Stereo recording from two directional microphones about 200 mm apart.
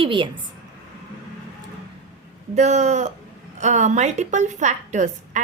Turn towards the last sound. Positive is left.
turn(degrees=-35)  # may be behind; listen again after turning